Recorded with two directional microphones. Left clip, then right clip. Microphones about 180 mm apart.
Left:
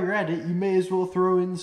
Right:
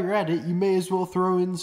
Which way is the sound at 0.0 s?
50° right (ahead or behind).